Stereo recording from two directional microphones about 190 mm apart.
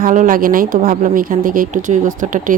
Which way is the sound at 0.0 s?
45° right (ahead or behind).